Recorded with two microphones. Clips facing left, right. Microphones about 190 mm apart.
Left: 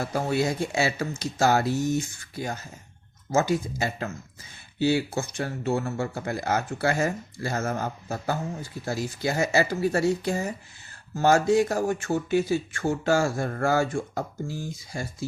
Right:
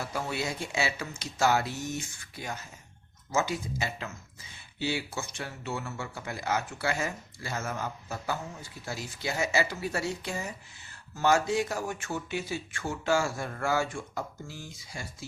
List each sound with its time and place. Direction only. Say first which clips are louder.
0.0 s speech: left 8 dB; 45° left (ahead or behind)